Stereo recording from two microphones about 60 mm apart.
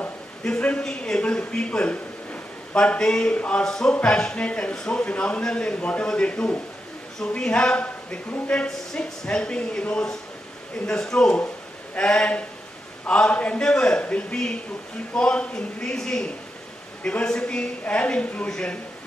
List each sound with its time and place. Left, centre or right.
0.4 s a man's voice: centre